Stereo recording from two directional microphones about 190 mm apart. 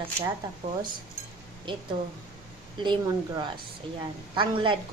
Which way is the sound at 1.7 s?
25° right (ahead or behind).